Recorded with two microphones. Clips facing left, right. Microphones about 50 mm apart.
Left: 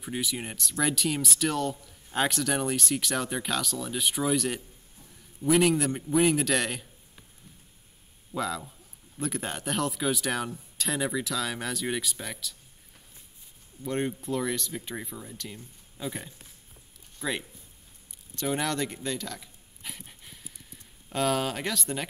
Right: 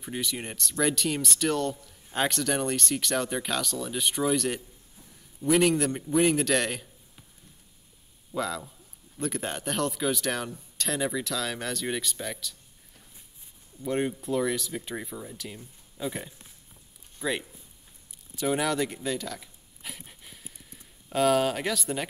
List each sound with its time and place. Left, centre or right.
0.0 s speech: centre
8.3 s a man's voice: centre
13.8 s speech: centre
18.3 s a sound: centre
21.1 s speech: centre